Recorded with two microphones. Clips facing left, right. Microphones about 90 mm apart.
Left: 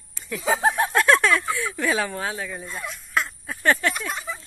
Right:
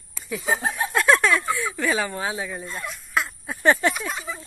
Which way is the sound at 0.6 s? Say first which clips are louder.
Left 5 dB; 60° left (ahead or behind).